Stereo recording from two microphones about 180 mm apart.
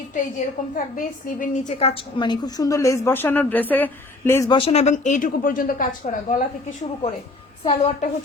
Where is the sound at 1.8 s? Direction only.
30° left (ahead or behind); by 4.4 s 10° left (ahead or behind).